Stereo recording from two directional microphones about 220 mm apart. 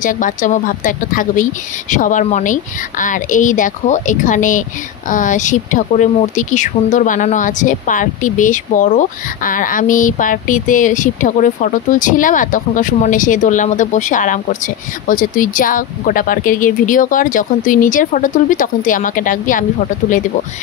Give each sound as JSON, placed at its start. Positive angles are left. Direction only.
{"t": 0.0, "sound": "speech", "side_deg": 35}